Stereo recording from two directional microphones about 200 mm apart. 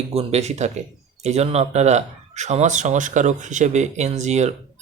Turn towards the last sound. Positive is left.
turn(degrees=-35)  # may be behind; listen again after turning